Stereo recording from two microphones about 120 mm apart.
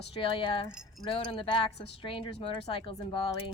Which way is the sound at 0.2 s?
45° left (ahead or behind).